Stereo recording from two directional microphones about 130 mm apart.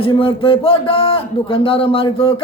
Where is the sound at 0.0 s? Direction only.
45° left (ahead or behind).